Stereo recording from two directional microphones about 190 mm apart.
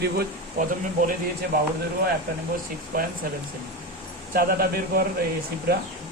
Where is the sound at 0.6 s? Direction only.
45° right (ahead or behind).